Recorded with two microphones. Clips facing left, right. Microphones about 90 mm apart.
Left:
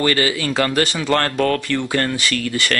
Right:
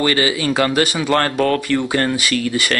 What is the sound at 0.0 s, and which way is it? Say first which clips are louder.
Speech: right 1 dB; 15° right (ahead or behind).